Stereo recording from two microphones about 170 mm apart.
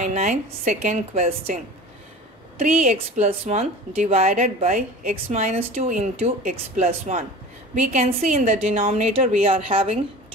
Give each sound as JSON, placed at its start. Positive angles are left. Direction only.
{"t": 0.0, "sound": "a woman's voice", "side_deg": -45}
{"t": 2.6, "sound": "a woman's voice", "side_deg": -45}